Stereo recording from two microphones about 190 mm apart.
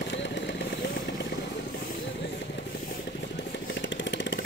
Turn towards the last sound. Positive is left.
turn(degrees=70)  # may be behind; listen again after turning